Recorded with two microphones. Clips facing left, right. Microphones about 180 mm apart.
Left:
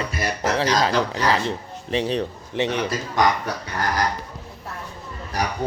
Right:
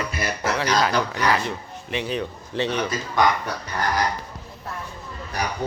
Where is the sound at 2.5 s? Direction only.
20° left (ahead or behind).